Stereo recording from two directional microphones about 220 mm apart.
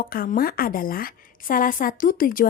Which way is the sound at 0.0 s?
40° left (ahead or behind).